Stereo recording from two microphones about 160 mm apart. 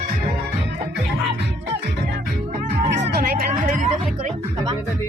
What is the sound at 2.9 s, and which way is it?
Vehicle, 85° right.